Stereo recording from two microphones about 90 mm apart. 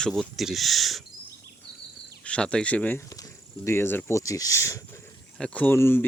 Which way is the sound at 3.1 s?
40° left (ahead or behind).